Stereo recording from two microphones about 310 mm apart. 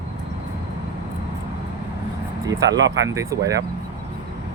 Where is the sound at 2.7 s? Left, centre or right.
Right.